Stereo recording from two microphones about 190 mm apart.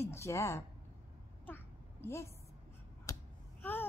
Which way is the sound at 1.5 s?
10° left (ahead or behind).